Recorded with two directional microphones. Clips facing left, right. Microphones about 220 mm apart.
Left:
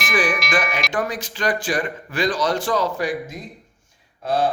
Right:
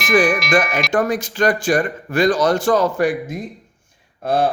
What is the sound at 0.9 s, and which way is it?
A man's voice, 45° right (ahead or behind).